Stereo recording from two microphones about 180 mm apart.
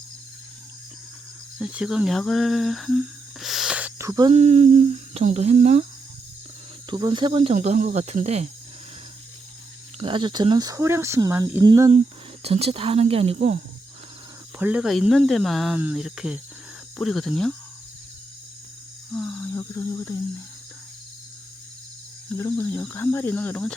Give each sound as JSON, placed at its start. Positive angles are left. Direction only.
{"t": 1.5, "sound": "speech", "side_deg": -5}
{"t": 4.3, "sound": "speech", "side_deg": -40}
{"t": 6.9, "sound": "speech", "side_deg": -25}
{"t": 7.5, "sound": "speech", "side_deg": -40}
{"t": 10.0, "sound": "speech", "side_deg": -25}
{"t": 11.9, "sound": "speech", "side_deg": -35}
{"t": 14.6, "sound": "speech", "side_deg": -5}
{"t": 19.1, "sound": "a sound", "side_deg": 5}
{"t": 19.5, "sound": "speech", "side_deg": 15}
{"t": 22.3, "sound": "speech", "side_deg": 15}